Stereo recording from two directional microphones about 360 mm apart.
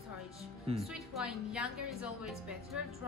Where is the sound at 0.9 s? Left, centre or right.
Centre.